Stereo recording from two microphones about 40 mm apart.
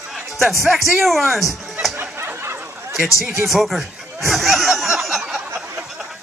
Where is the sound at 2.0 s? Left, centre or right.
Right.